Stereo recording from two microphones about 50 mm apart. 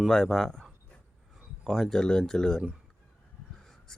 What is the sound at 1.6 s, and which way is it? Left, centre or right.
Speech, centre.